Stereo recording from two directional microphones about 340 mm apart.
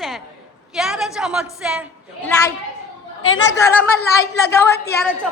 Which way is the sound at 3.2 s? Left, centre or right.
Left.